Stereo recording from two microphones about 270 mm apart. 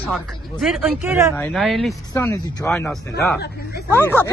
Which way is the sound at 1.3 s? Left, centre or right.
Centre.